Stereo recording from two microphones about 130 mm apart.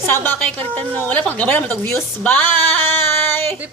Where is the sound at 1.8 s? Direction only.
10° left (ahead or behind).